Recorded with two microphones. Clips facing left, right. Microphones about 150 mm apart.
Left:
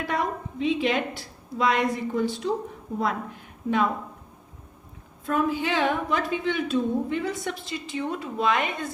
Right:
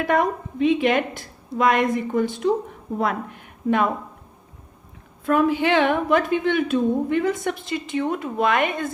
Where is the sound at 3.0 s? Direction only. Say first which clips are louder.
Right 3 dB; 60° right (ahead or behind).